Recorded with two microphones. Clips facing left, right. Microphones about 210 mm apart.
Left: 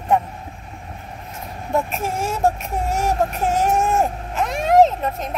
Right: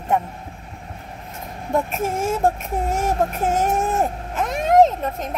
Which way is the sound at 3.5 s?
50° right (ahead or behind).